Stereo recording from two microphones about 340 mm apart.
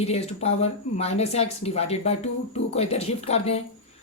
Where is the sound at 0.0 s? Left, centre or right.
Centre.